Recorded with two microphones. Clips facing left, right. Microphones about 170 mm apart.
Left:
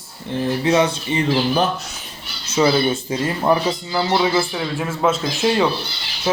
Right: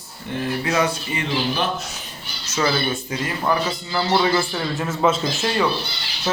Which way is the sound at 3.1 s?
25° left (ahead or behind).